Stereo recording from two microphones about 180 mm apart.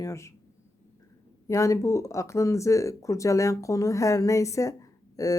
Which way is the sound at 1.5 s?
15° left (ahead or behind).